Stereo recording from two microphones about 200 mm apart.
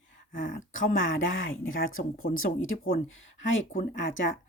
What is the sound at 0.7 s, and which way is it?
Speech, 75° left (ahead or behind).